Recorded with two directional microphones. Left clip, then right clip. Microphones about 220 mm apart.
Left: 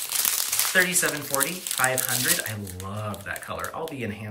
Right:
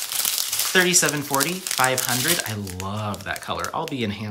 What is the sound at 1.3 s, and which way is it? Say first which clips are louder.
Speech: right 4 dB; 15° right (ahead or behind).